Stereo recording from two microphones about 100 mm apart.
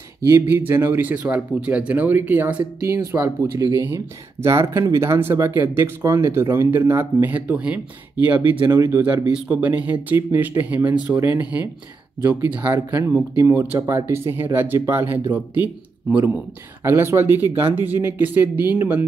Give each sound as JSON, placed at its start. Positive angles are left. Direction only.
{"t": 0.3, "sound": "speech", "side_deg": -25}
{"t": 8.6, "sound": "speech", "side_deg": -35}
{"t": 9.3, "sound": "speech", "side_deg": -15}
{"t": 12.7, "sound": "speech", "side_deg": -30}